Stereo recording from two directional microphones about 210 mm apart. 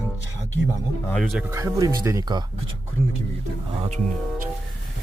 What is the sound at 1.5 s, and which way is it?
Speech, 15° right (ahead or behind).